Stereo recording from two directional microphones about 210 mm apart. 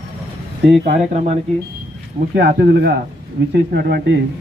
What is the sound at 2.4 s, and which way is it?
Speech, 50° right (ahead or behind).